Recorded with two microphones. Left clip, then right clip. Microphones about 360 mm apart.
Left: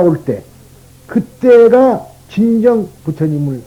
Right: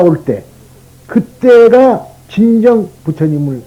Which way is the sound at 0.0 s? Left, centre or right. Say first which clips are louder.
Right 3 dB; left.